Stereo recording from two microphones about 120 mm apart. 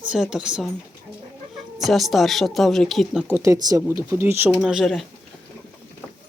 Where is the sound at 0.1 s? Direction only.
5° right (ahead or behind).